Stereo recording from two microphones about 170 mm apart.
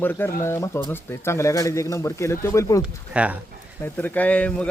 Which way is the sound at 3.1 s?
5° right (ahead or behind).